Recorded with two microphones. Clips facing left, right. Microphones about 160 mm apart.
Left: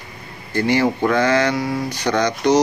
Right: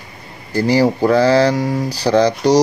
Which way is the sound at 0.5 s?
35° right (ahead or behind).